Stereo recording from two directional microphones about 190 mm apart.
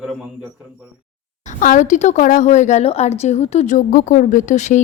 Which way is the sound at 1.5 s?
45° left (ahead or behind).